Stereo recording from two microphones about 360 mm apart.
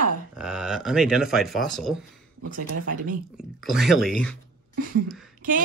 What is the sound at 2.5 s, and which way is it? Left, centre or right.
Speech, right.